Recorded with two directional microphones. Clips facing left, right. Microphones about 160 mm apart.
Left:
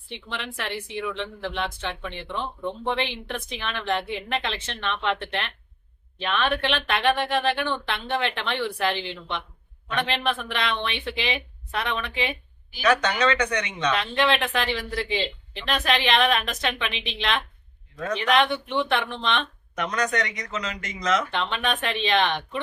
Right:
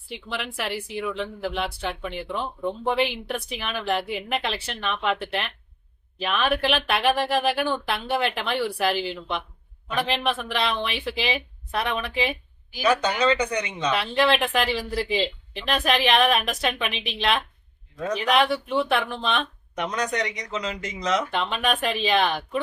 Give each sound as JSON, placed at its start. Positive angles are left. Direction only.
{"t": 0.1, "sound": "speech", "side_deg": -5}